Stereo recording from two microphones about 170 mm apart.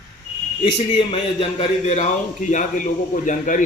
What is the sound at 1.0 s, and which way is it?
A man's voice, 35° left (ahead or behind).